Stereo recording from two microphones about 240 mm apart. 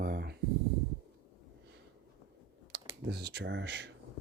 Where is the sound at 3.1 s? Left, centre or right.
Right.